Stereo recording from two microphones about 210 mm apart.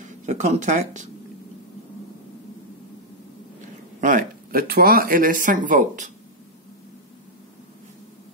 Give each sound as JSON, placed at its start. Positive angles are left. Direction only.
{"t": 0.0, "sound": "speech", "side_deg": -35}
{"t": 4.0, "sound": "speech", "side_deg": -40}